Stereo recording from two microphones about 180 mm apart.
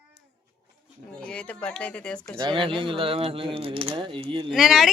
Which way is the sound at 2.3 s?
25° right (ahead or behind).